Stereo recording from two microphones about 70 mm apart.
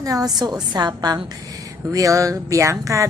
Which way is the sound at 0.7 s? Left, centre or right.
Right.